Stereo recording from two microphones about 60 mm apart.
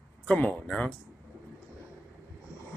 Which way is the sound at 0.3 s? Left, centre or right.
Left.